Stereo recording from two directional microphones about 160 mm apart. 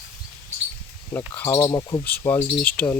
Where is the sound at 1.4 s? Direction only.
15° left (ahead or behind).